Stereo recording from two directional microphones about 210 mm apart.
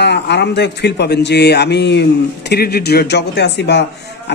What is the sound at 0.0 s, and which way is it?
Speech, 55° left (ahead or behind).